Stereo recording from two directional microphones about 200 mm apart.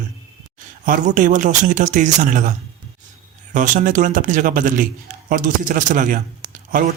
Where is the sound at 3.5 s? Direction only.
40° right (ahead or behind).